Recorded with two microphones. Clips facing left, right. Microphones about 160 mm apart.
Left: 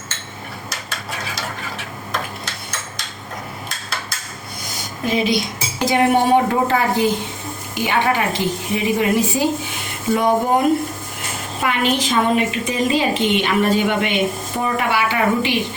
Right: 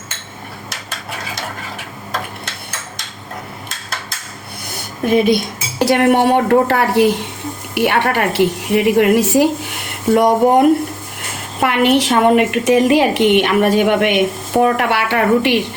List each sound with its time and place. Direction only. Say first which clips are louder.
4.7 s cutlery: right 6 dB; 55° right (ahead or behind); by 7.2 s 75° right (ahead or behind)
7.8 s a woman's voice: right 3 dB; 70° right (ahead or behind)